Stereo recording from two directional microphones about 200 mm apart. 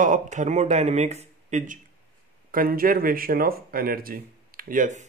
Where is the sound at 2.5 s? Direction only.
45° right (ahead or behind).